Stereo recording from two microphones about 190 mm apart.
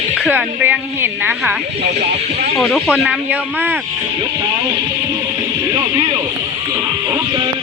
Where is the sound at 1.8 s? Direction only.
35° right (ahead or behind).